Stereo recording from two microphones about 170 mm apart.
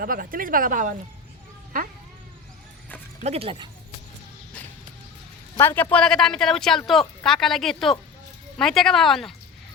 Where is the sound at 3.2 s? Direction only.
35° right (ahead or behind).